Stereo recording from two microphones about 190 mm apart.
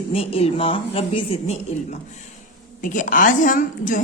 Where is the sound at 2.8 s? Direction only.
45° left (ahead or behind).